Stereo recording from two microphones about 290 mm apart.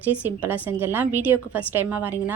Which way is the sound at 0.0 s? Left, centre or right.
Centre.